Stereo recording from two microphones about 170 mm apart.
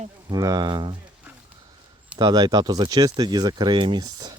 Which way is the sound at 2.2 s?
25° right (ahead or behind).